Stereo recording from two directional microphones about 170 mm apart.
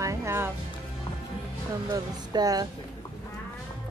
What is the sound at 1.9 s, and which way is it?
Speech, 25° right (ahead or behind).